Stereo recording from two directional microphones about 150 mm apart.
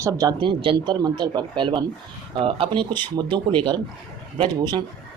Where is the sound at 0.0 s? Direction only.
25° right (ahead or behind).